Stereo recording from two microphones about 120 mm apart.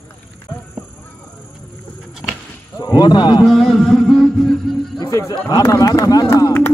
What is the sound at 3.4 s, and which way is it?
Music, 5° left (ahead or behind).